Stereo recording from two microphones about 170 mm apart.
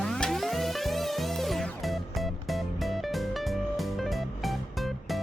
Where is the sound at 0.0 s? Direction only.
5° left (ahead or behind).